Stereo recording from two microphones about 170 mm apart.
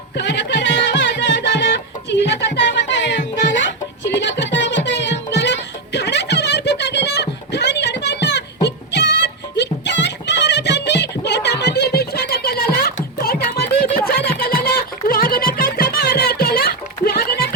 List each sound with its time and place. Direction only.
0.2 s music: 90° left; by 12.9 s 60° left (ahead or behind)
13.0 s a sound: 55° left (ahead or behind)
14.1 s music: 65° left (ahead or behind)